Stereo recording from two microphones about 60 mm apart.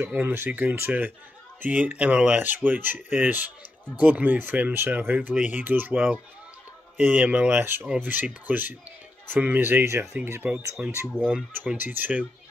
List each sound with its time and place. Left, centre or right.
0.0 s speech: right
7.6 s speech: right